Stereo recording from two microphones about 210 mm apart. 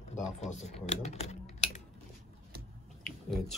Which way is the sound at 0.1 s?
35° left (ahead or behind).